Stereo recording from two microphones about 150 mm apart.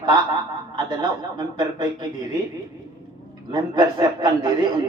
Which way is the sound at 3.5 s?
25° right (ahead or behind).